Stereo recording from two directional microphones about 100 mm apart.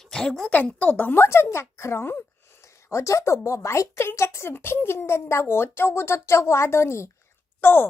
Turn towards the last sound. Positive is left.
turn(degrees=20)  # may be behind; listen again after turning